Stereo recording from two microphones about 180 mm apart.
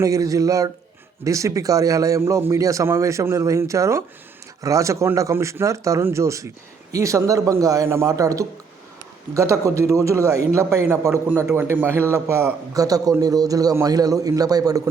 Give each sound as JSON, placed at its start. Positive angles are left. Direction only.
{"t": 0.0, "sound": "a man's voice", "side_deg": -20}